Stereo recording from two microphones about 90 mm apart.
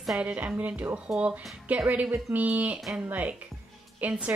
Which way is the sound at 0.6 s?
15° right (ahead or behind).